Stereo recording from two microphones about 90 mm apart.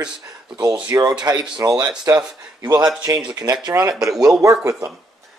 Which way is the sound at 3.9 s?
5° right (ahead or behind).